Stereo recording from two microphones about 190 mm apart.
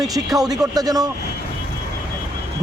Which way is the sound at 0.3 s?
20° right (ahead or behind).